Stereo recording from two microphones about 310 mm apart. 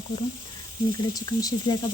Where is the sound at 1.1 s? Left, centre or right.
Centre.